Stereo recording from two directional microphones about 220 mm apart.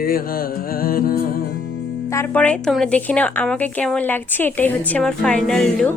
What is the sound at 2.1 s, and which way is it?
A woman's voice, 10° left (ahead or behind).